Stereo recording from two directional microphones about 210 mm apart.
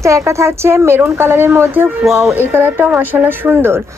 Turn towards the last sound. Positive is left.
turn(degrees=-10)  # may be behind; listen again after turning